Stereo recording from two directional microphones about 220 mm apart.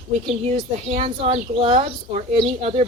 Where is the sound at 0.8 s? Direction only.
30° right (ahead or behind).